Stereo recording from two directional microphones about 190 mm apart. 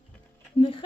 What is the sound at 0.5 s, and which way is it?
Speech, 30° left (ahead or behind).